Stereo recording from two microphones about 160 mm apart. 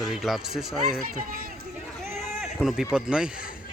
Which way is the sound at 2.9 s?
5° right (ahead or behind).